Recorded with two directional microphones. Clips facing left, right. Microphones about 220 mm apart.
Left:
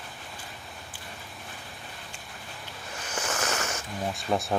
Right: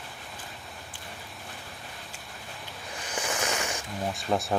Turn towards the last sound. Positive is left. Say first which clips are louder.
# even
turn(degrees=0)  # may be behind; listen again after turning